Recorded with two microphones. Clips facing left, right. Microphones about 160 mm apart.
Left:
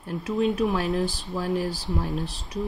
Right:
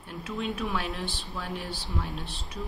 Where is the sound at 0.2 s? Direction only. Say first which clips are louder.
Left 9 dB; 40° left (ahead or behind).